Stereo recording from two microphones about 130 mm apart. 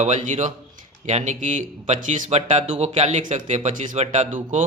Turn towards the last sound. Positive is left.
turn(degrees=-70)  # may be behind; listen again after turning